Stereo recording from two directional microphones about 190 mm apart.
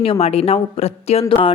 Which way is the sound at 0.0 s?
30° left (ahead or behind).